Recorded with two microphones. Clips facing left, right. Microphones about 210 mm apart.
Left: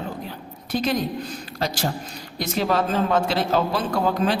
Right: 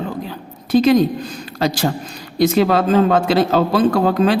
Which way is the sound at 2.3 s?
90° right.